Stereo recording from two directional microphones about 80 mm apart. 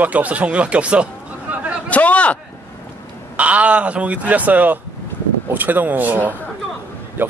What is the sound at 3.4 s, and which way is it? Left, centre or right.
Speech, centre.